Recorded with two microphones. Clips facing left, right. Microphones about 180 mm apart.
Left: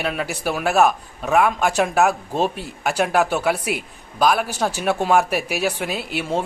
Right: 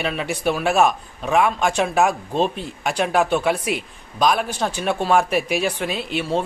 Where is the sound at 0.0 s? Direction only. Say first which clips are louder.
Right 2 dB; 5° left (ahead or behind).